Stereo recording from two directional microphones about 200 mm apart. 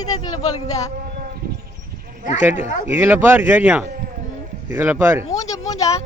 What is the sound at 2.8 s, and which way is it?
Speech, 10° right (ahead or behind).